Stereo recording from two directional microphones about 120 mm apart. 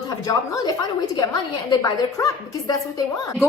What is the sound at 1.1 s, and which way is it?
A woman's voice, 35° left (ahead or behind).